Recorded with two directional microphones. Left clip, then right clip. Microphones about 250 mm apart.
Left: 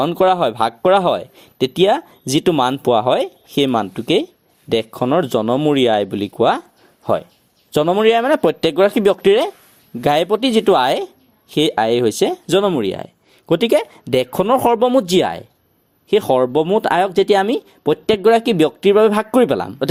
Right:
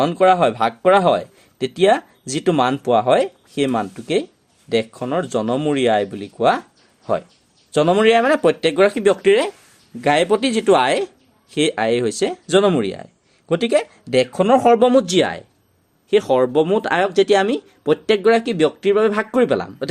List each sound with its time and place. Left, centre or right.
0.0 s speech: left
7.7 s speech: left